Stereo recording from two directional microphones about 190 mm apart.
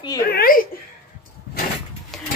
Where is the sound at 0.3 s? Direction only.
50° left (ahead or behind).